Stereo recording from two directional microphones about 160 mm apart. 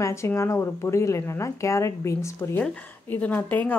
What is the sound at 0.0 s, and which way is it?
Speech, 15° left (ahead or behind).